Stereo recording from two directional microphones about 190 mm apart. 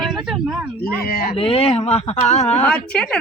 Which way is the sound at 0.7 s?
50° left (ahead or behind).